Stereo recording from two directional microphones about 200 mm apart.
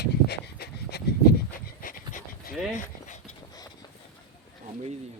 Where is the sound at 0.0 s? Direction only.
55° left (ahead or behind).